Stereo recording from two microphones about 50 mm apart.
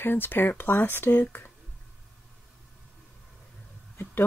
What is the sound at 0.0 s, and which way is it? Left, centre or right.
Speech, left.